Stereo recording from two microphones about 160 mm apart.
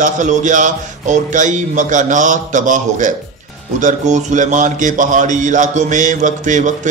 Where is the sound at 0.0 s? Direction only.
50° right (ahead or behind).